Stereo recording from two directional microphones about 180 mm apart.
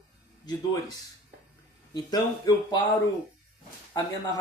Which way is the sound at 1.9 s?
20° left (ahead or behind).